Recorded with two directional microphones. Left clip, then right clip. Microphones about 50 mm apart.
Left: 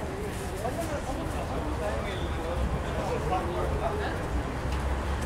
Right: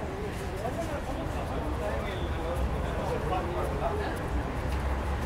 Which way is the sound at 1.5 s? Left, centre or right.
Centre.